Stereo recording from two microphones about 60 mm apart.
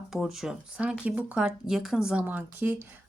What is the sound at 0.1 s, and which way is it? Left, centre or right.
Speech, centre.